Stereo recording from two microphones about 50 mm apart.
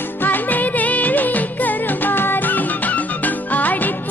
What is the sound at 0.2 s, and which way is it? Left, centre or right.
Music of bollywood, left.